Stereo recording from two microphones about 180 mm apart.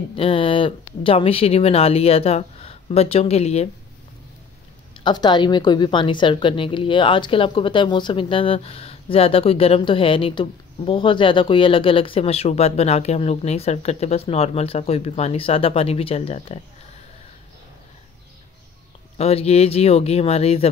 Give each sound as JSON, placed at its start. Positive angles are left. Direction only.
{"t": 0.1, "sound": "a woman's voice", "side_deg": 30}
{"t": 5.0, "sound": "a woman's voice", "side_deg": 25}
{"t": 19.1, "sound": "a woman's voice", "side_deg": 35}